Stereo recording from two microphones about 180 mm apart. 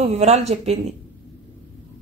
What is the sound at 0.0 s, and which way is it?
Speech, 35° right (ahead or behind).